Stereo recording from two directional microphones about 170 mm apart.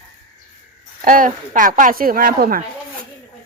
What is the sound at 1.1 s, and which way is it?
Speech, 50° right (ahead or behind).